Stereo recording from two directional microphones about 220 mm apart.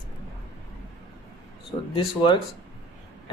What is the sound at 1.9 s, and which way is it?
Speech, 20° left (ahead or behind).